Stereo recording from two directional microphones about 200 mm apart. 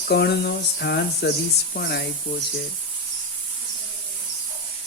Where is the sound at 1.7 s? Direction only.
55° left (ahead or behind).